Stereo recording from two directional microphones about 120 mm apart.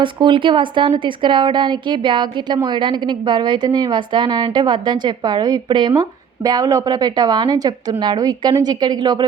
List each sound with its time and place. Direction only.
0.0 s a woman's voice: 40° right (ahead or behind)